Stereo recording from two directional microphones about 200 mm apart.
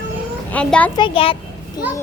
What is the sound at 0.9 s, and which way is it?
Speech, 25° left (ahead or behind).